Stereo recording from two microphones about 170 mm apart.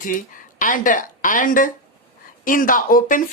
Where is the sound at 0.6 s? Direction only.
50° left (ahead or behind).